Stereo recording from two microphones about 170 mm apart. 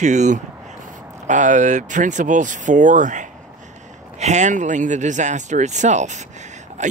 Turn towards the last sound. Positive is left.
turn(degrees=-45)  # may be behind; listen again after turning